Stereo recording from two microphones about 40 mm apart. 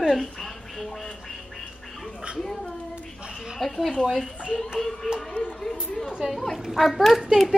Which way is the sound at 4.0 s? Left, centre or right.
Centre.